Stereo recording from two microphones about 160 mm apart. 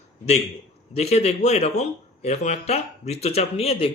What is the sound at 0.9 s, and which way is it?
A man's voice, 40° left (ahead or behind).